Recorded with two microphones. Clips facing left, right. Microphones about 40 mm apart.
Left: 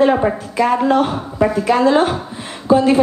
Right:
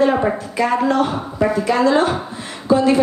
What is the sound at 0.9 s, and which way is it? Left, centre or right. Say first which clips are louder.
A woman's voice: left 2 dB; left.